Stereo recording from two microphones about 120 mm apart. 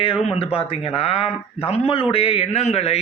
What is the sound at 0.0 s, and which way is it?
A man's voice, 50° left (ahead or behind).